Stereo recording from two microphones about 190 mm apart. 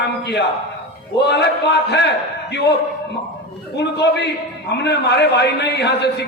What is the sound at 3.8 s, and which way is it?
A man's voice, 65° left (ahead or behind).